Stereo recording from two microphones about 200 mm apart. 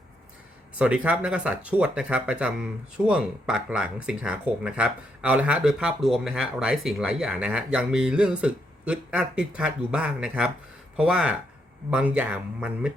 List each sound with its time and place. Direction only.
0.8 s speech: 5° right (ahead or behind)